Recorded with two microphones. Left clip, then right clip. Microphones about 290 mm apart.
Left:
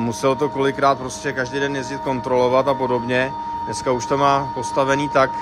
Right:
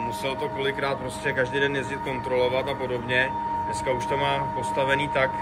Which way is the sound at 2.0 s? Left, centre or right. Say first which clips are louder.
Left 7 dB; centre.